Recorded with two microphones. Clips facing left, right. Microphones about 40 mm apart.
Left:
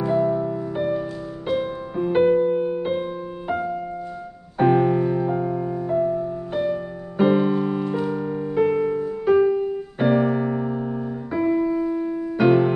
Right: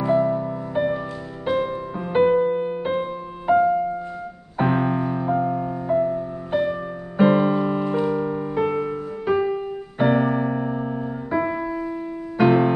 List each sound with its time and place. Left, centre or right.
0.0 s music: centre
2.3 s music: centre
9.9 s keyboard: centre
10.7 s piano: centre